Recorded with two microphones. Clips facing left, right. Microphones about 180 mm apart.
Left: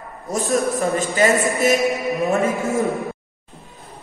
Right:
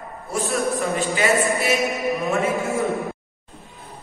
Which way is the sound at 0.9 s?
45° left (ahead or behind).